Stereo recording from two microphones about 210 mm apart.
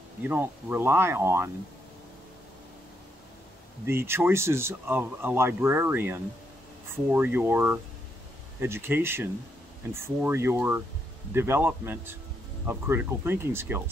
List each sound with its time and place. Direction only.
0.2 s speech: 10° right (ahead or behind)
3.8 s speech: 10° right (ahead or behind)